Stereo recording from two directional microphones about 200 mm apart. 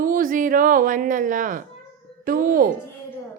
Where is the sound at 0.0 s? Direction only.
45° right (ahead or behind).